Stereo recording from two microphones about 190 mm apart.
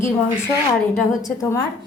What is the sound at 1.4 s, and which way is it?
Speech, 15° left (ahead or behind).